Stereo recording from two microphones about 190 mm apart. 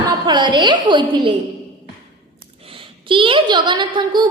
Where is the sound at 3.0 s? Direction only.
25° right (ahead or behind).